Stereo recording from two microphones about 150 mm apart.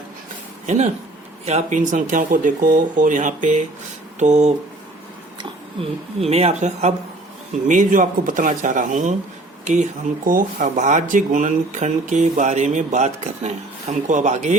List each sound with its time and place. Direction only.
1.5 s speech: 50° right (ahead or behind)
6.1 s speech: 45° right (ahead or behind)